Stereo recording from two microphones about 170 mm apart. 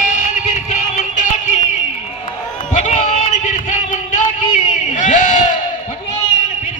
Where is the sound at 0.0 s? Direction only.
45° left (ahead or behind).